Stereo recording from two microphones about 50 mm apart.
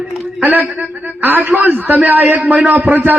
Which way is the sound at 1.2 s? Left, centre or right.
Right.